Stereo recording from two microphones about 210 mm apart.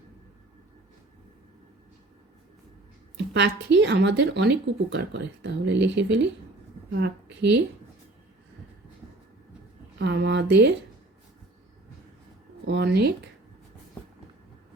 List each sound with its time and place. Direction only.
3.3 s speech: 55° right (ahead or behind)
10.0 s speech: 55° right (ahead or behind)
12.6 s speech: 55° right (ahead or behind)